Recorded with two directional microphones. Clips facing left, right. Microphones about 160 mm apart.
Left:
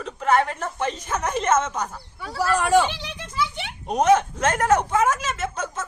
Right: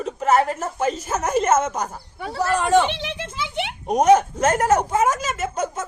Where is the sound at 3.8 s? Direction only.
10° right (ahead or behind).